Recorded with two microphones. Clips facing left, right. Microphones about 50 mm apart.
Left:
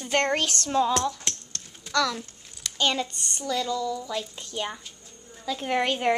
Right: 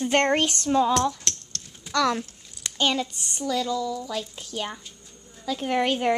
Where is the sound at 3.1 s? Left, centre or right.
Centre.